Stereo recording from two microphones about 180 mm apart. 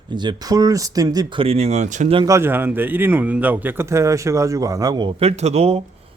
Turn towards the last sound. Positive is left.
turn(degrees=-35)  # may be behind; listen again after turning